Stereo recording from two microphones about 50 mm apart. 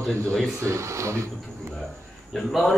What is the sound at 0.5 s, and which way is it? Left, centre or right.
Speech, right.